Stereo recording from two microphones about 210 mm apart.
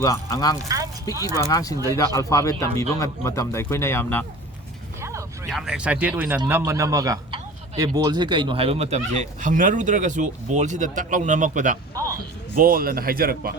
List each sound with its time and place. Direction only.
0.0 s a man's voice: 15° left (ahead or behind)
4.9 s vehicle: 15° right (ahead or behind)
5.5 s a man's voice: centre (ahead or behind); by 13.5 s 45° right (ahead or behind)